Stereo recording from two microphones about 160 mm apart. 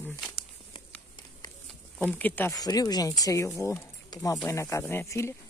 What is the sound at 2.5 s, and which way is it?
Speech, 25° left (ahead or behind).